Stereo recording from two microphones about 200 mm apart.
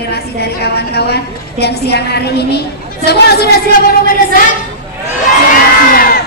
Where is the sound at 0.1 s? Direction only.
55° left (ahead or behind).